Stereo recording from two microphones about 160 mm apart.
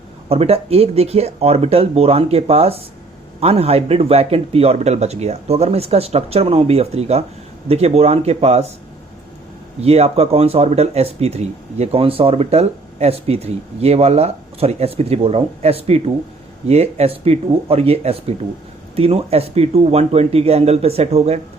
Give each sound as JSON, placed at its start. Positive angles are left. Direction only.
{"t": 0.3, "sound": "speech", "side_deg": -40}
{"t": 9.8, "sound": "speech", "side_deg": -40}